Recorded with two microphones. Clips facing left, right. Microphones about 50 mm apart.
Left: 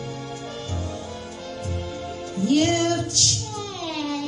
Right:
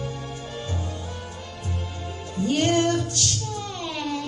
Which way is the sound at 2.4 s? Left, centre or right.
Centre.